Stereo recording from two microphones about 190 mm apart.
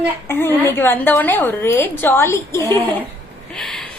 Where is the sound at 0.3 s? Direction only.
10° left (ahead or behind).